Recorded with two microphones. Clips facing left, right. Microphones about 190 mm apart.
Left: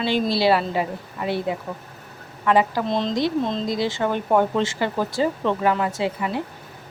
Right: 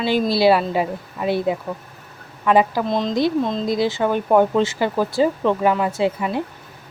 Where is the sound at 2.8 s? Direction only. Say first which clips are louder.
Right 3 dB; centre (ahead or behind); by 6.4 s 20° right (ahead or behind).